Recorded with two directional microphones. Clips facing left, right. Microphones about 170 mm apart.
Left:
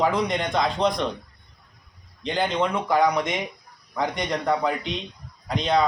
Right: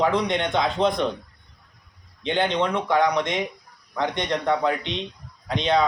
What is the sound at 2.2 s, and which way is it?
A man's voice, centre (ahead or behind).